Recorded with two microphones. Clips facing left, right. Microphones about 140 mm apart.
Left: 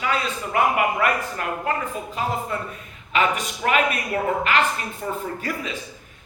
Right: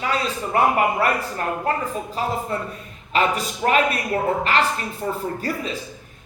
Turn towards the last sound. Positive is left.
turn(degrees=-35)  # may be behind; listen again after turning